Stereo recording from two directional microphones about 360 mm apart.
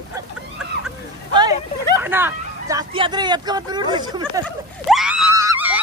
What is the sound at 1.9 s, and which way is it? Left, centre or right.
Vehicle, centre.